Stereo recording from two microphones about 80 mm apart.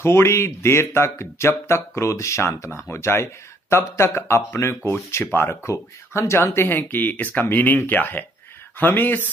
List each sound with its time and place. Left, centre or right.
0.0 s speech: left